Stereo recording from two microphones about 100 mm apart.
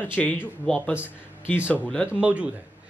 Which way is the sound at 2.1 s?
15° right (ahead or behind).